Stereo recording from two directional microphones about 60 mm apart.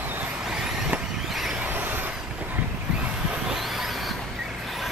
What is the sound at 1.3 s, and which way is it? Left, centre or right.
Vehicle, centre.